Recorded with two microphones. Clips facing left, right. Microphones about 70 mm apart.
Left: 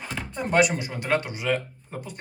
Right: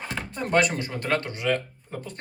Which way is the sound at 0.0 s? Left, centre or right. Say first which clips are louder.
Even; centre.